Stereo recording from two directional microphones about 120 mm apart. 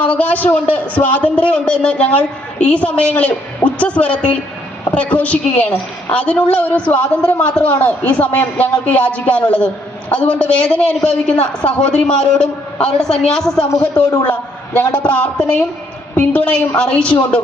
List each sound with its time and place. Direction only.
0.0 s a man's voice: 10° left (ahead or behind)
13.7 s a man's voice: 30° left (ahead or behind)
14.3 s a man's voice: 15° left (ahead or behind)